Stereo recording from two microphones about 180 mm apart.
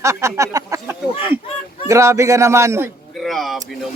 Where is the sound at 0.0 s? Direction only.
15° right (ahead or behind).